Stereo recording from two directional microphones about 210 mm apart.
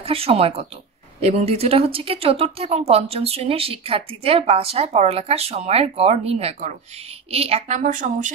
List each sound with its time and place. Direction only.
0.0 s a woman's voice: 25° right (ahead or behind)